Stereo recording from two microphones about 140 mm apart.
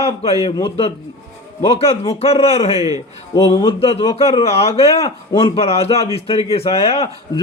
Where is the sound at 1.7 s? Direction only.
45° left (ahead or behind).